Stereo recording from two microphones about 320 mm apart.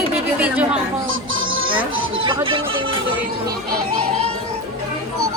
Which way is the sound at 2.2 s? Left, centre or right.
Centre.